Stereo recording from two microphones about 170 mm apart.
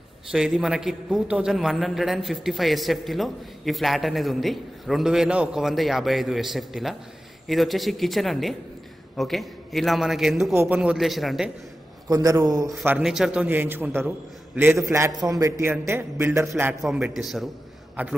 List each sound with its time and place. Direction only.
0.3 s a man's voice: 5° right (ahead or behind)
12.1 s a man's voice: 20° right (ahead or behind)
12.8 s a man's voice: 5° right (ahead or behind)
16.8 s a man's voice: 5° right (ahead or behind)